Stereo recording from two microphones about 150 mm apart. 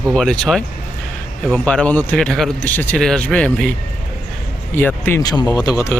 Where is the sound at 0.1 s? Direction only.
5° left (ahead or behind).